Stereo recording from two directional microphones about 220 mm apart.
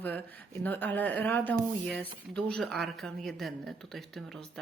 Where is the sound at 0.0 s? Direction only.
10° left (ahead or behind).